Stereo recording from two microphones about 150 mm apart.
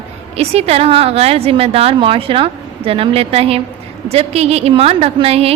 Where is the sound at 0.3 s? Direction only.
45° right (ahead or behind).